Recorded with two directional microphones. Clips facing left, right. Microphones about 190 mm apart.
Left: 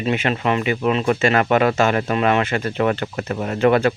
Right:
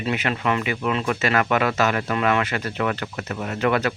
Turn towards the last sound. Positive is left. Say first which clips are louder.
# left 6 dB
turn(degrees=30)  # may be behind; listen again after turning